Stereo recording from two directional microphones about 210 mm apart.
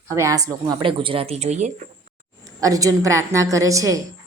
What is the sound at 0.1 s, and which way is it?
Speech, 15° right (ahead or behind).